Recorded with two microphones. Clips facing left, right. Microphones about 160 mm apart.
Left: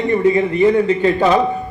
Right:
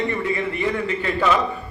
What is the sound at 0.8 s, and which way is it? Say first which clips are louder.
Speech: left 7 dB; 35° left (ahead or behind).